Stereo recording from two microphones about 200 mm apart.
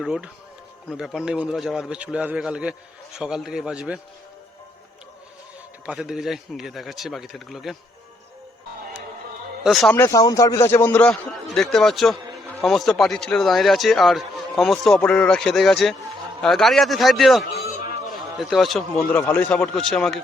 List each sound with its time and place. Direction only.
0.0 s a man's voice: 5° right (ahead or behind)
5.8 s a man's voice: 5° right (ahead or behind)
9.6 s a man's voice: centre (ahead or behind)
11.1 s a man's voice: centre (ahead or behind)